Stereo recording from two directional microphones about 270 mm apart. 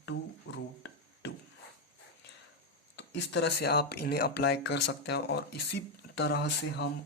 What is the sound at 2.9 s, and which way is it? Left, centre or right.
Speech, left.